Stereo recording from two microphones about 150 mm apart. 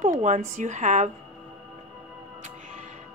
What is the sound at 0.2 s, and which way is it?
Speech, 55° right (ahead or behind).